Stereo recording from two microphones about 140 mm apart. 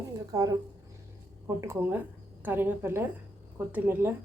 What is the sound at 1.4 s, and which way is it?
A woman's voice, 15° right (ahead or behind).